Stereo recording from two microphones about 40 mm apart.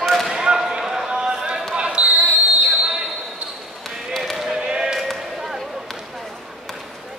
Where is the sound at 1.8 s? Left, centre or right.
Right.